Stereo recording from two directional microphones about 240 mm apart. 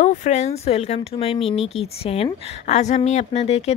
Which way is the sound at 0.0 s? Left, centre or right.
Left.